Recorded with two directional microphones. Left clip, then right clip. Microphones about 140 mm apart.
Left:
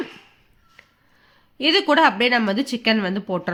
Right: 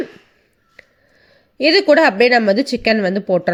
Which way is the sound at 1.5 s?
20° right (ahead or behind).